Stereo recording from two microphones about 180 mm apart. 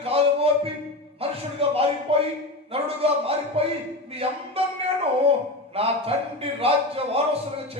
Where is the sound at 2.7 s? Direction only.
30° right (ahead or behind).